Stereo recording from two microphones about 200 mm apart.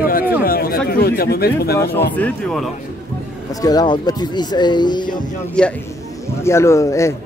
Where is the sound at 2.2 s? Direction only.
5° left (ahead or behind).